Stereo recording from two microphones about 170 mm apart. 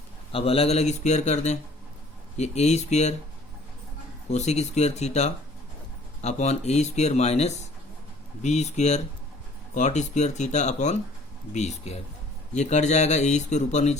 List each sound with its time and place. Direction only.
0.3 s speech: 35° left (ahead or behind)
4.3 s speech: 40° left (ahead or behind)